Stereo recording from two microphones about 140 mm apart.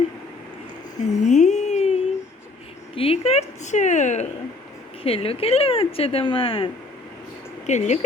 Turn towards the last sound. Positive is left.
turn(degrees=55)  # may be behind; listen again after turning